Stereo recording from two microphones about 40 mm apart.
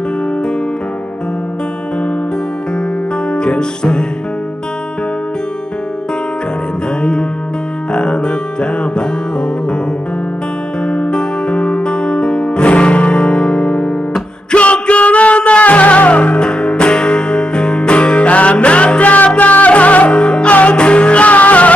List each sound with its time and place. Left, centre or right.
3.3 s music: left
7.0 s music: left
10.9 s music: left
14.5 s music: left
16.4 s music: left